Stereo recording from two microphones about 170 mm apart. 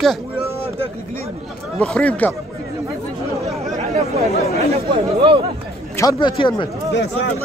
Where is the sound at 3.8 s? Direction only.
40° right (ahead or behind).